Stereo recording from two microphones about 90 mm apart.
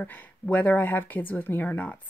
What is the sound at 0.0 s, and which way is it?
Speech, 20° left (ahead or behind).